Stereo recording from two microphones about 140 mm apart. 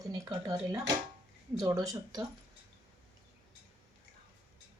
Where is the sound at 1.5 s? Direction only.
25° right (ahead or behind).